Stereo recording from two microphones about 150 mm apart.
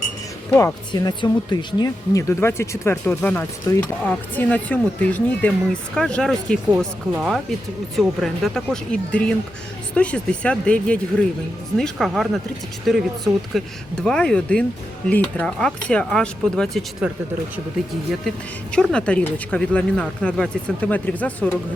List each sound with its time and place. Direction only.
0.5 s speech: 25° left (ahead or behind); by 6.6 s 5° left (ahead or behind)
6.7 s speech: 10° right (ahead or behind)
7.9 s speech: centre (ahead or behind)
17.0 s speech: 5° right (ahead or behind)
18.3 s speech: 5° left (ahead or behind)